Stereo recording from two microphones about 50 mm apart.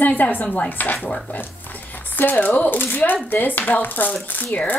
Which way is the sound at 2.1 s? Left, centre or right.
Left.